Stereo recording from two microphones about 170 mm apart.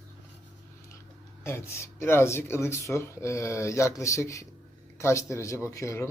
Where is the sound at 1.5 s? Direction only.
15° left (ahead or behind).